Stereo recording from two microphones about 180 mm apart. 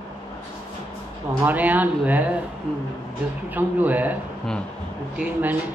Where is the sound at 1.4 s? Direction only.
10° right (ahead or behind).